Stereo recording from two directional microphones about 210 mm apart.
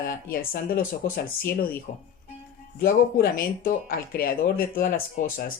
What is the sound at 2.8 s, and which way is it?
Speech, 45° left (ahead or behind).